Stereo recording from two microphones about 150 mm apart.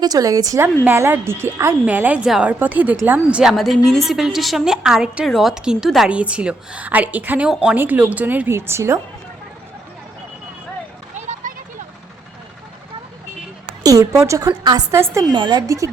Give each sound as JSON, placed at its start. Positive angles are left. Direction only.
{"t": 0.0, "sound": "a woman's voice", "side_deg": -25}
{"t": 11.1, "sound": "a sound", "side_deg": -50}
{"t": 13.8, "sound": "a woman's voice", "side_deg": -20}